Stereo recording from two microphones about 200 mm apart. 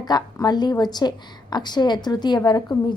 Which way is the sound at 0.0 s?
20° left (ahead or behind).